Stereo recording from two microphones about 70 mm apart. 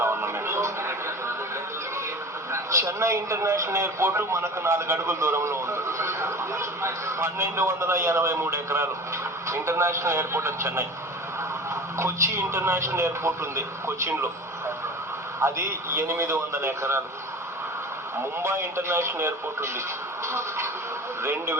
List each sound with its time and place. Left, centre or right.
0.0 s a sound: right
2.5 s a man's voice: right
15.4 s a man's voice: right
18.4 s a man's voice: right